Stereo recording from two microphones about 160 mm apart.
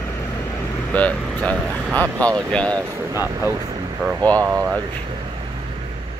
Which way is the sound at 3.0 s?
15° right (ahead or behind).